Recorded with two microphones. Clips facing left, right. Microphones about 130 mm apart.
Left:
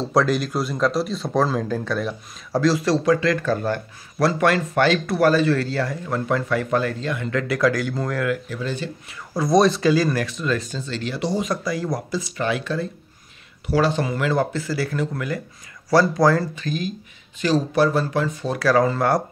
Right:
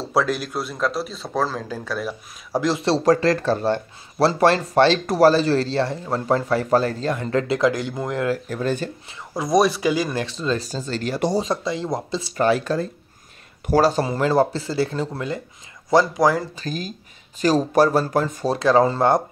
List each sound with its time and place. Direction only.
0.0 s speech: 5° right (ahead or behind)
2.5 s speech: 20° right (ahead or behind)
3.0 s speech: 40° right (ahead or behind); by 8.3 s 20° right (ahead or behind)
8.3 s speech: 45° right (ahead or behind)
9.1 s speech: 15° right (ahead or behind)
10.2 s speech: 30° right (ahead or behind); by 11.4 s 45° right (ahead or behind)
11.4 s speech: 25° right (ahead or behind)
12.4 s speech: 40° right (ahead or behind); by 16.4 s 15° right (ahead or behind)
16.5 s speech: 40° right (ahead or behind)
18.6 s speech: 25° right (ahead or behind)